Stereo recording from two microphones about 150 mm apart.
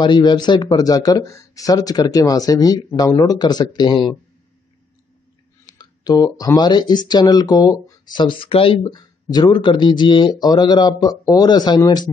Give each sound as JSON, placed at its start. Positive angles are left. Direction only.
{"t": 0.0, "sound": "speech", "side_deg": 30}
{"t": 5.7, "sound": "speech", "side_deg": 25}